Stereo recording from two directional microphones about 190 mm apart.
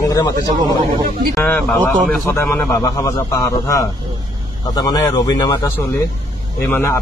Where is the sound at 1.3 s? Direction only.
5° left (ahead or behind).